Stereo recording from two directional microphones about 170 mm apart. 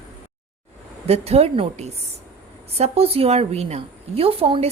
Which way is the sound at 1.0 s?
35° right (ahead or behind).